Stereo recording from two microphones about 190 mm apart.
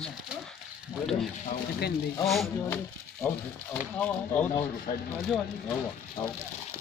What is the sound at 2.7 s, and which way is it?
Speech, 15° left (ahead or behind).